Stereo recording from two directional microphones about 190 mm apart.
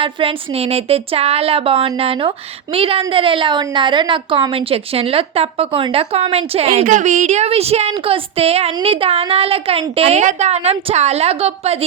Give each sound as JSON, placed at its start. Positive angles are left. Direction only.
{"t": 0.0, "sound": "a woman's voice", "side_deg": -30}